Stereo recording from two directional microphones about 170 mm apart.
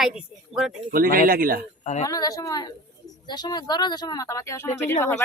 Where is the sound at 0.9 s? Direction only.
60° right (ahead or behind).